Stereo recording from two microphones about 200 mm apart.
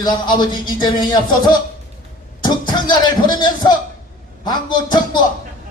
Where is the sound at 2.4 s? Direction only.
20° left (ahead or behind).